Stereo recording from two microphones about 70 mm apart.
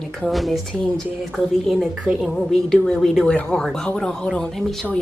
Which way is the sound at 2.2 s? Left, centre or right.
Centre.